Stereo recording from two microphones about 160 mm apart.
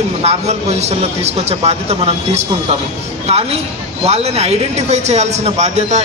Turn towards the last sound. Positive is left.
turn(degrees=-45)  # may be behind; listen again after turning